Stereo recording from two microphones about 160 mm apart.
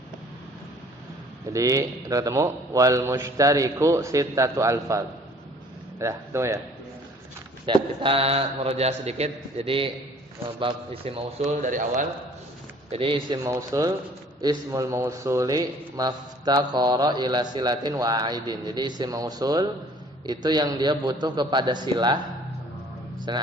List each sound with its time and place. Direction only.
1.5 s a man's voice: 20° right (ahead or behind)
7.7 s a man's voice: 35° right (ahead or behind)
11.6 s a man's voice: 55° right (ahead or behind)
12.9 s a man's voice: 35° right (ahead or behind)
23.3 s a man's voice: 30° right (ahead or behind)